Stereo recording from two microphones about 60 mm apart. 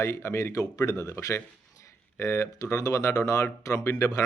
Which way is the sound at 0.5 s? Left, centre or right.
Left.